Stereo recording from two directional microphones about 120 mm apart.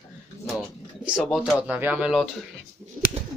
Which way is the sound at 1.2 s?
5° left (ahead or behind).